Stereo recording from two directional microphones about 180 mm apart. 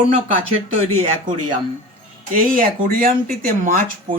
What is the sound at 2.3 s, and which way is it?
Speech, 50° right (ahead or behind).